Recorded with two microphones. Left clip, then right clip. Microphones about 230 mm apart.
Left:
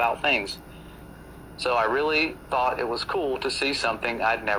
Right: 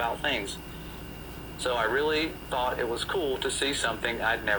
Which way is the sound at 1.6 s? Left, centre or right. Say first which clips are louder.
Left 4 dB; centre.